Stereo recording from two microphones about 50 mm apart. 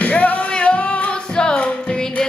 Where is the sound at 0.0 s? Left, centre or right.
Left.